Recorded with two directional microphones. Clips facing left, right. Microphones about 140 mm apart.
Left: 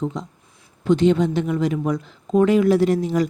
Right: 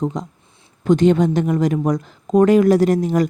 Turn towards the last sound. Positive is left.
turn(degrees=-45)  # may be behind; listen again after turning